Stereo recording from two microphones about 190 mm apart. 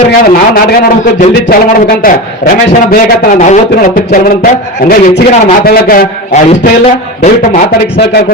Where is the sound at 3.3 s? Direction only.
40° left (ahead or behind).